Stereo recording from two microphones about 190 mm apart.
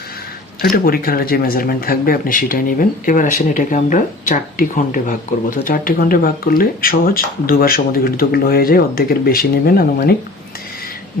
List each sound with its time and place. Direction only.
0.6 s speech: 50° left (ahead or behind)